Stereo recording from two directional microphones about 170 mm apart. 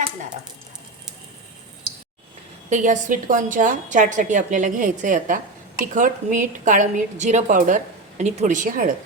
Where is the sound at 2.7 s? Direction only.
45° right (ahead or behind).